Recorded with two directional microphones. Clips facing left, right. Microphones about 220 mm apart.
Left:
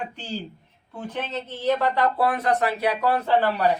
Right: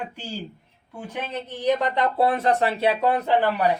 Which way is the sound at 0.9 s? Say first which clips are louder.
Left 1 dB; 10° right (ahead or behind).